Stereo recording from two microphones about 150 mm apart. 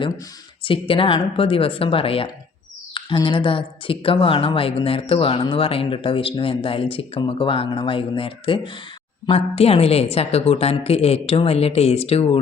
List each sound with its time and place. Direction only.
0.6 s a woman's voice: 35° left (ahead or behind)